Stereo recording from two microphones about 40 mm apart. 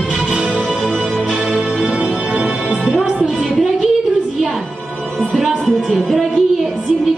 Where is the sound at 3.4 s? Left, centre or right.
Centre.